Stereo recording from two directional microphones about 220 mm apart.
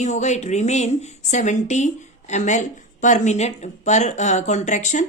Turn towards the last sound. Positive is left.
turn(degrees=35)  # may be behind; listen again after turning